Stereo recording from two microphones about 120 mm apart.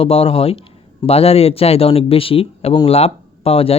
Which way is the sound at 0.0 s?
50° left (ahead or behind).